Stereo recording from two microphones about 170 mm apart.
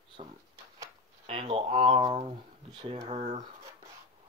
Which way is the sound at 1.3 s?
35° right (ahead or behind).